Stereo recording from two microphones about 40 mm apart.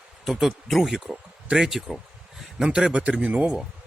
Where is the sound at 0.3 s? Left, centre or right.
Centre.